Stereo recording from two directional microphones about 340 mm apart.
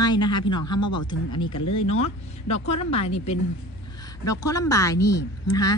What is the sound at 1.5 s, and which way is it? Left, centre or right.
Speech, left.